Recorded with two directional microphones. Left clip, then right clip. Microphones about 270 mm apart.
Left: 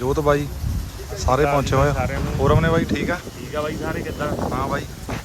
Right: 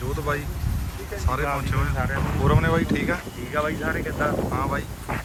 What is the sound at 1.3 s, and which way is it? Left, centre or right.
Speech, centre.